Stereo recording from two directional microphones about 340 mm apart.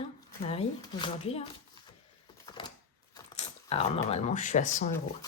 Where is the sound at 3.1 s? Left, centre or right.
Centre.